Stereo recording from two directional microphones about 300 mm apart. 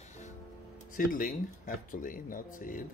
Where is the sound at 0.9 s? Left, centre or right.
Left.